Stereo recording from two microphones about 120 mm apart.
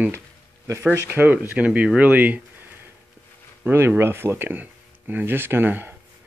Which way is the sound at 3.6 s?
20° right (ahead or behind).